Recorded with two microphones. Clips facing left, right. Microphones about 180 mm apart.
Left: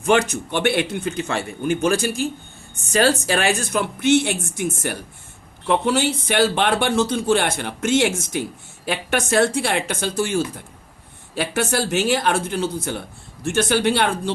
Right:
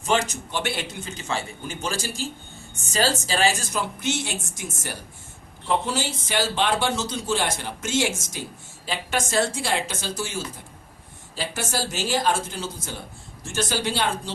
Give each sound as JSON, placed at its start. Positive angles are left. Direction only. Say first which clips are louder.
{"t": 0.0, "sound": "speech", "louder": "left 6 dB", "side_deg": 60}